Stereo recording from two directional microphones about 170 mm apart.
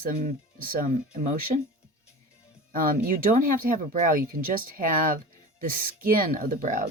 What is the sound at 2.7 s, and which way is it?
Speech, 55° right (ahead or behind).